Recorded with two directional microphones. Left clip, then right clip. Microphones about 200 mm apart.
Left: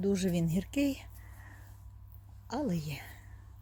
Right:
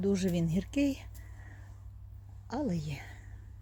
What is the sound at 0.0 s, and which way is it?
Speech, 5° left (ahead or behind).